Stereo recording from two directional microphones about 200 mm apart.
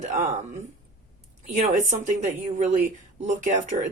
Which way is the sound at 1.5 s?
40° right (ahead or behind).